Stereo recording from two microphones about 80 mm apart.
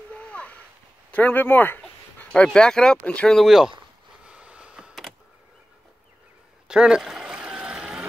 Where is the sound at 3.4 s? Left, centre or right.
Centre.